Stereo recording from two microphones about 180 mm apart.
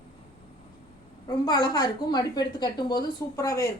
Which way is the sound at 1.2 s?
20° left (ahead or behind).